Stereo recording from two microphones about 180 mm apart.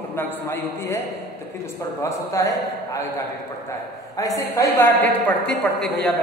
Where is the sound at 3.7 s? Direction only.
20° left (ahead or behind).